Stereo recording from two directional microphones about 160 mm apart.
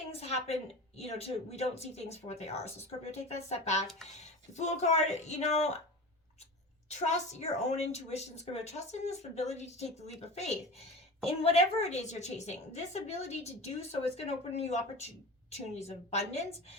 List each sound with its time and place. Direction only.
0.1 s a sound: 40° left (ahead or behind)
0.9 s a woman's voice: 40° left (ahead or behind)
6.8 s a woman's voice: 45° left (ahead or behind)